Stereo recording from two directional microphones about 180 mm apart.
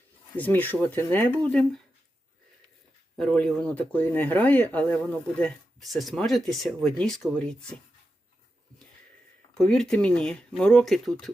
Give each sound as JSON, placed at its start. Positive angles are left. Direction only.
{"t": 0.3, "sound": "speech", "side_deg": 10}
{"t": 3.2, "sound": "speech", "side_deg": 5}
{"t": 9.6, "sound": "speech", "side_deg": 5}